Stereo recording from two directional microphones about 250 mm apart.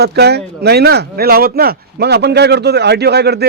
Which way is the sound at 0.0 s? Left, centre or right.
Right.